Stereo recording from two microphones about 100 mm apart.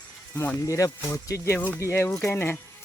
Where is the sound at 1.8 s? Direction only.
30° left (ahead or behind).